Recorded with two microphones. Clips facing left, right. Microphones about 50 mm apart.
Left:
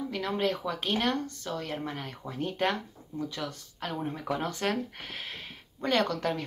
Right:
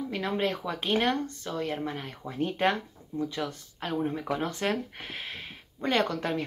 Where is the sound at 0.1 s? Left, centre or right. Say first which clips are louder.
Right 1 dB; centre.